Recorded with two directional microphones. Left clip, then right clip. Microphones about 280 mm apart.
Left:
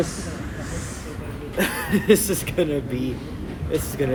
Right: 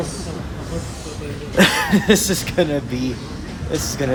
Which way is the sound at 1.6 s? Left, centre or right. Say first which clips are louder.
Right 9 dB; right.